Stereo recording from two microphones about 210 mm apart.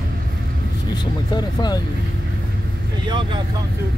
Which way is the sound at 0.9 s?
20° left (ahead or behind).